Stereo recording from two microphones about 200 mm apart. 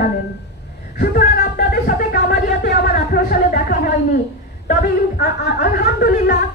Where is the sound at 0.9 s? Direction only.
50° left (ahead or behind).